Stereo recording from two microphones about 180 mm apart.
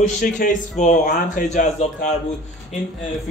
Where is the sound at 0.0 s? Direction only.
45° left (ahead or behind).